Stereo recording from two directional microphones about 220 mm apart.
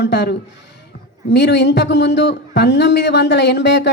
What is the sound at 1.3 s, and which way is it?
A man's voice, 50° left (ahead or behind).